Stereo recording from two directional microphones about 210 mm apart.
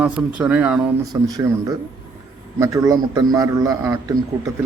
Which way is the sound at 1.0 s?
20° right (ahead or behind).